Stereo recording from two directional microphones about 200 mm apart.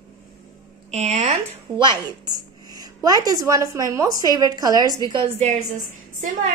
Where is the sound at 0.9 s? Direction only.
35° right (ahead or behind).